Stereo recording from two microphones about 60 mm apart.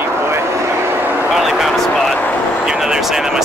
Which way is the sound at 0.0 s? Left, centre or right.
Right.